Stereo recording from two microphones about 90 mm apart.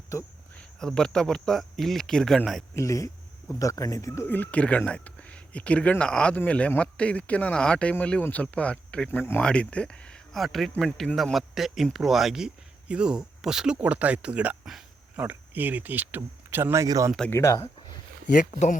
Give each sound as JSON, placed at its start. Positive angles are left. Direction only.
{"t": 0.5, "sound": "speech", "side_deg": 10}
{"t": 2.7, "sound": "speech", "side_deg": 35}
{"t": 4.3, "sound": "speech", "side_deg": 15}
{"t": 9.0, "sound": "speech", "side_deg": 25}
{"t": 9.4, "sound": "speech", "side_deg": 10}
{"t": 16.8, "sound": "speech", "side_deg": -40}
{"t": 17.3, "sound": "speech", "side_deg": 35}